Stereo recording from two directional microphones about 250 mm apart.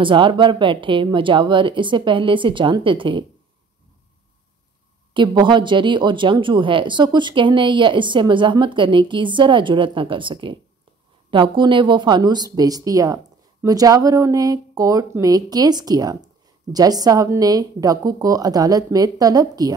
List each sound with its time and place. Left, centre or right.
0.0 s speech: centre
5.1 s speech: centre